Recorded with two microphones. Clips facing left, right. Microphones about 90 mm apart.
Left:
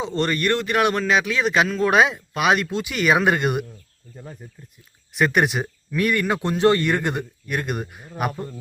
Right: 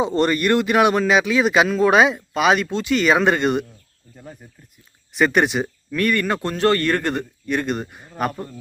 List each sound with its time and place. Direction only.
0.0 s speech: 10° right (ahead or behind); by 3.7 s 5° left (ahead or behind)
5.1 s speech: 5° left (ahead or behind)
5.9 s a man's voice: 15° left (ahead or behind)